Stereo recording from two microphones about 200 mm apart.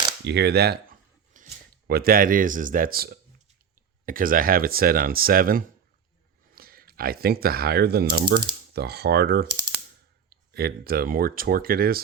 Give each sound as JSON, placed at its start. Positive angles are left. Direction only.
{"t": 0.3, "sound": "speech", "side_deg": -55}